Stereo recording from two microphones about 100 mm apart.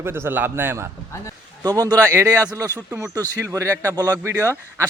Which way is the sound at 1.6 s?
40° right (ahead or behind).